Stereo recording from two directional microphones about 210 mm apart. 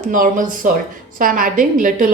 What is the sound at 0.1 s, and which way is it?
Speech, 40° right (ahead or behind).